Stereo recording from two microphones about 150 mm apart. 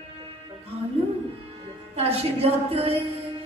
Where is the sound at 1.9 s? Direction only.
40° right (ahead or behind).